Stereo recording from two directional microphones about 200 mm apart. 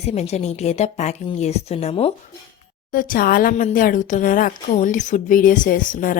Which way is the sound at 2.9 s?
45° left (ahead or behind).